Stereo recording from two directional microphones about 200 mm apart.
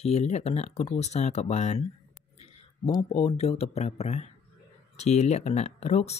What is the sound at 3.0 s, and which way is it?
Speech, 30° left (ahead or behind).